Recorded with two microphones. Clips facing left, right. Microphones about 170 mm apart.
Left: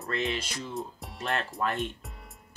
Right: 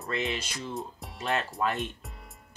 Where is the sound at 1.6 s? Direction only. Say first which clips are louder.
Left 1 dB; 20° right (ahead or behind).